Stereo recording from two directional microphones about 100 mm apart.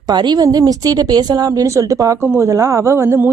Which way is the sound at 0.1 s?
45° right (ahead or behind).